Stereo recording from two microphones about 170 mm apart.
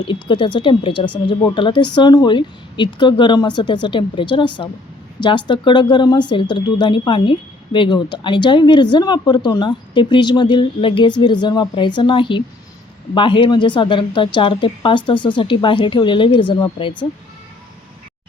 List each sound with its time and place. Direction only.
0.0 s a woman's voice: 30° left (ahead or behind)